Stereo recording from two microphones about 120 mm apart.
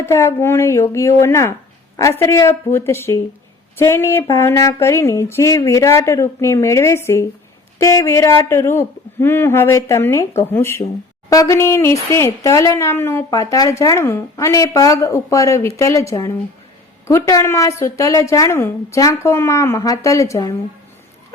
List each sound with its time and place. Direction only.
0.0 s speech: 25° left (ahead or behind)